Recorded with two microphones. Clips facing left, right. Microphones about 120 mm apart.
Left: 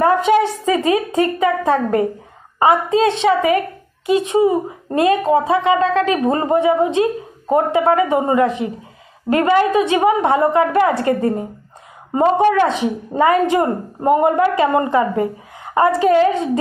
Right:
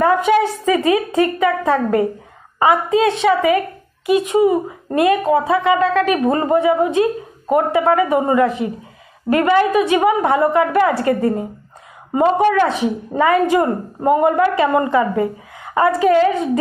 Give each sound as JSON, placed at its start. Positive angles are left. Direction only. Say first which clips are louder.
{"t": 0.2, "sound": "a woman's voice", "louder": "even", "side_deg": 20}